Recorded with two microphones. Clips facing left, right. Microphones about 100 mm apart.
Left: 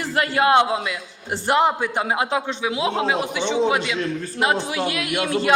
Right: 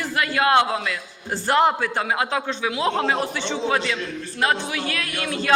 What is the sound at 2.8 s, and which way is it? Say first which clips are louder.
A man's voice: right 1 dB; 10° left (ahead or behind).